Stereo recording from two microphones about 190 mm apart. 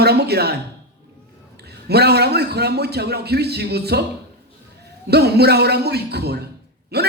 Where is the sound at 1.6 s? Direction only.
60° right (ahead or behind).